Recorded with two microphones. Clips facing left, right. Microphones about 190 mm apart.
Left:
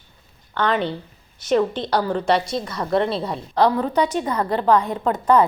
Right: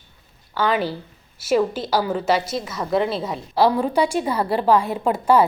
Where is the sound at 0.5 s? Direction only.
5° right (ahead or behind).